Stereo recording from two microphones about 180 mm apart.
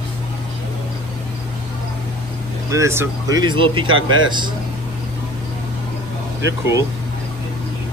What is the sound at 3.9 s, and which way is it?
Speech, 90° right.